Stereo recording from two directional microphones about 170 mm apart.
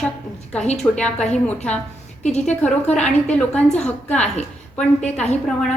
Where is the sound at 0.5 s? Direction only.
40° left (ahead or behind).